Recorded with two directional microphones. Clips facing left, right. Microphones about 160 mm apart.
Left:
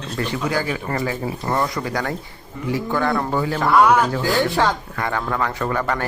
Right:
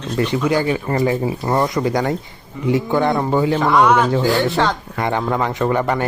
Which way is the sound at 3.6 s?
5° left (ahead or behind).